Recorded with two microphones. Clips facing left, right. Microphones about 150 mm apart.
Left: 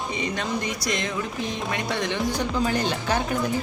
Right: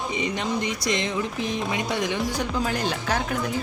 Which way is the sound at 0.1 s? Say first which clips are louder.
Right 1 dB; 20° right (ahead or behind).